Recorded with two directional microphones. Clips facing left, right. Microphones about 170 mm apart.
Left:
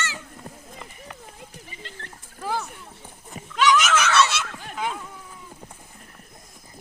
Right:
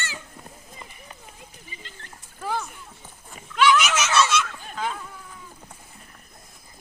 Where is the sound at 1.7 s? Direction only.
70° left (ahead or behind).